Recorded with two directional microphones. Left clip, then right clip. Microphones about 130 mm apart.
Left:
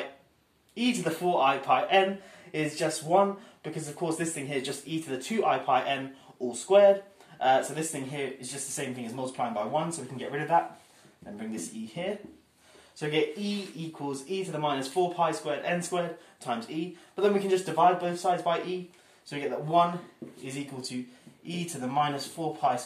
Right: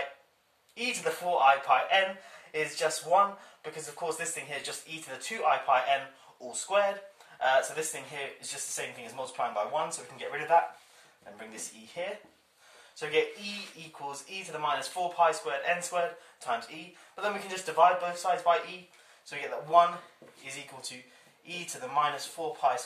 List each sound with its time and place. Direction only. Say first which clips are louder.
0.7 s speech: left 2 dB; 15° left (ahead or behind)
8.4 s speech: left 1 dB; centre (ahead or behind)
19.2 s speech: left 3 dB; centre (ahead or behind)